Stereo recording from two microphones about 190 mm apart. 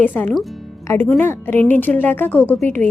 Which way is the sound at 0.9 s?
10° left (ahead or behind).